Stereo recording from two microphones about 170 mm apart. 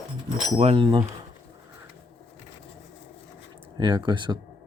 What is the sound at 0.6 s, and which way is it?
Speech, 30° right (ahead or behind).